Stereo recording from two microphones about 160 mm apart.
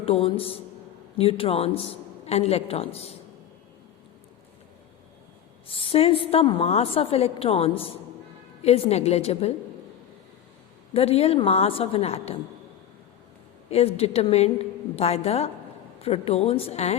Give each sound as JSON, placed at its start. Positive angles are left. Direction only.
{"t": 0.0, "sound": "a woman's voice", "side_deg": 35}
{"t": 5.6, "sound": "a woman's voice", "side_deg": 35}
{"t": 10.9, "sound": "a woman's voice", "side_deg": 40}
{"t": 13.7, "sound": "a woman's voice", "side_deg": 40}